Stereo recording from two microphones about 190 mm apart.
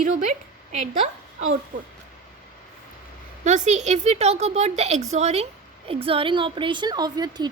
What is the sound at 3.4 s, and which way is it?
A woman's voice, 40° right (ahead or behind).